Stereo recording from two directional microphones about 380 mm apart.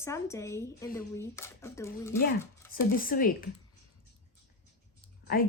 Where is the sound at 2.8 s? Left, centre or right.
Left.